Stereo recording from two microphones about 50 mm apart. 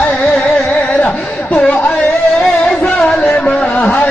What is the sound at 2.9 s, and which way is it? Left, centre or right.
Music, centre.